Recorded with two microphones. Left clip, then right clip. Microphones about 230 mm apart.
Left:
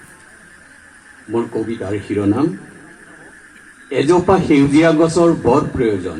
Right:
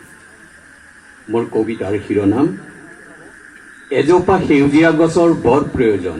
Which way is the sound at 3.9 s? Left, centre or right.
Right.